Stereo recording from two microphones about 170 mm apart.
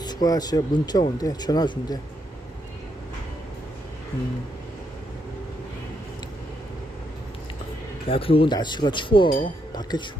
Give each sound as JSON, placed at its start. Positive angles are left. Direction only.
{"t": 0.0, "sound": "speech", "side_deg": 25}
{"t": 8.0, "sound": "speech", "side_deg": 35}